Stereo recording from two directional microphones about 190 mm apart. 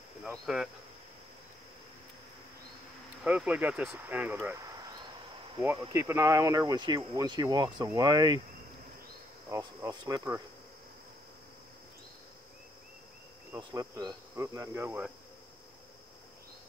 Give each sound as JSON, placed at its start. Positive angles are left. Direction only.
{"t": 0.2, "sound": "speech", "side_deg": 0}
{"t": 3.3, "sound": "cricket", "side_deg": -5}
{"t": 5.9, "sound": "speech", "side_deg": -15}
{"t": 9.5, "sound": "speech", "side_deg": -20}
{"t": 13.5, "sound": "cricket", "side_deg": -20}